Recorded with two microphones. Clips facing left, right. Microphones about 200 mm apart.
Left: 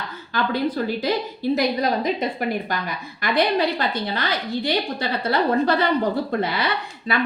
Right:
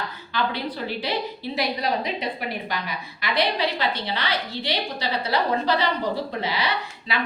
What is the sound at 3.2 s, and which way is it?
A woman's voice, 50° left (ahead or behind).